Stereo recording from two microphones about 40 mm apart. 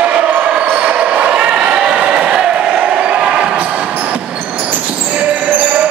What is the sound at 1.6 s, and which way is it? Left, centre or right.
Crowd, right.